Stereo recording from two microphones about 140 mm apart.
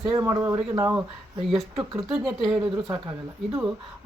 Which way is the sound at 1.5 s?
Centre (ahead or behind).